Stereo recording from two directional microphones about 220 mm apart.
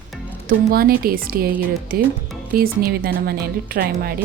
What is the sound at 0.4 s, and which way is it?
A woman's voice, 45° right (ahead or behind).